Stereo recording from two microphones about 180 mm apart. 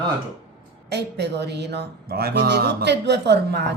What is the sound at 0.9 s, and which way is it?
Speech, 70° right (ahead or behind).